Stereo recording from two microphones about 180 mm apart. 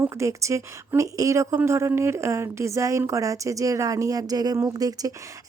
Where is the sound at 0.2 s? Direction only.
15° right (ahead or behind).